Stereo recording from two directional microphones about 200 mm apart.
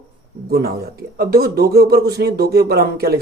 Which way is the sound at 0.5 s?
50° right (ahead or behind).